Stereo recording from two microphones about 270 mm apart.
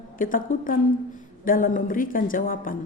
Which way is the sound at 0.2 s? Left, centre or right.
Left.